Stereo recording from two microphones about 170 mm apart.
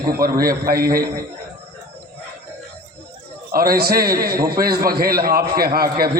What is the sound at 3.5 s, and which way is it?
A man's voice, 60° right (ahead or behind).